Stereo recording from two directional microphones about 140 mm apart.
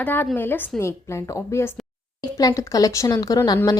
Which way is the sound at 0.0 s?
15° left (ahead or behind).